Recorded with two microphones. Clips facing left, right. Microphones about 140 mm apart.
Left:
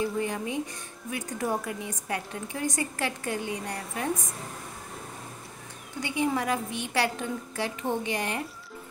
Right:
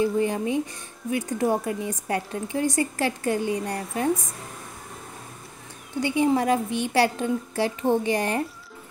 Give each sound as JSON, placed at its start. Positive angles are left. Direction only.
{"t": 0.0, "sound": "a woman's voice", "side_deg": -30}
{"t": 5.9, "sound": "a woman's voice", "side_deg": -30}